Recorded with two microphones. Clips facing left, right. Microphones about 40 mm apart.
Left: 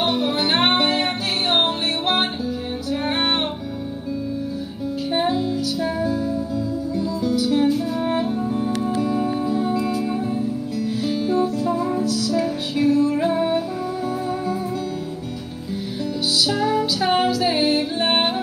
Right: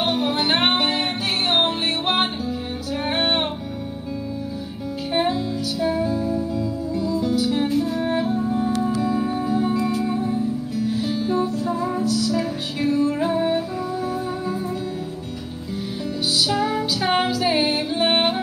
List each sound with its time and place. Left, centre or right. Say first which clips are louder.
0.3 s music: left 1 dB; centre
1.5 s music: left 1 dB; centre
5.1 s music: even; centre
7.1 s music: right 3 dB; right
7.3 s music: left 5 dB; centre
8.5 s music: right 1 dB; centre
9.5 s music: even; centre
10.8 s music: even; right
12.2 s music: left 1 dB; centre
13.2 s music: left 1 dB; centre
16.6 s music: left 2 dB; centre